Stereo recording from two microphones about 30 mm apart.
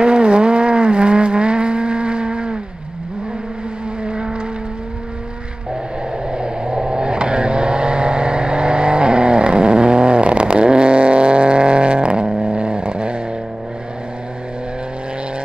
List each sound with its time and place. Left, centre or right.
0.0 s vehicle: right
4.0 s vehicle: right
6.3 s vehicle: right